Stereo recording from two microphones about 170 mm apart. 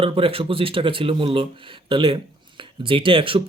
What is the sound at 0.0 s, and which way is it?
Speech, 35° right (ahead or behind).